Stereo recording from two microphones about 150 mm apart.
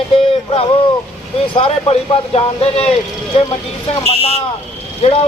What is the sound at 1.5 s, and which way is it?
Speech, 35° left (ahead or behind).